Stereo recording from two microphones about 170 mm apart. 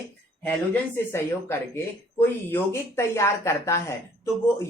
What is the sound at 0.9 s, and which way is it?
Speech, 15° left (ahead or behind).